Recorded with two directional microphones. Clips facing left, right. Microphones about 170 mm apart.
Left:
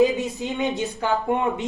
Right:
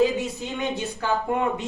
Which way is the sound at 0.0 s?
20° left (ahead or behind).